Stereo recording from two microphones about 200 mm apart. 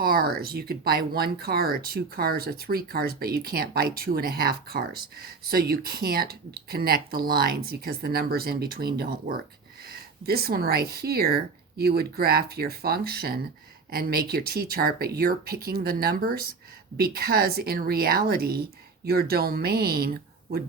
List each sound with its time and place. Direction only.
0.0 s speech: 50° right (ahead or behind)